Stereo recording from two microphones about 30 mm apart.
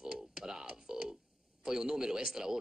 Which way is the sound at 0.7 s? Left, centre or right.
Right.